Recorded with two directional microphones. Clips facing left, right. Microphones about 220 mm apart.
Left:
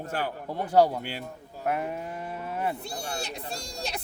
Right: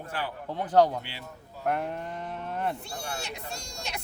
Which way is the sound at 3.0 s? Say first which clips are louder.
Left 1 dB; 35° left (ahead or behind).